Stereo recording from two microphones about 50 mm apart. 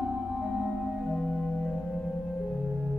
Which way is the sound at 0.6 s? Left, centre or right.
Centre.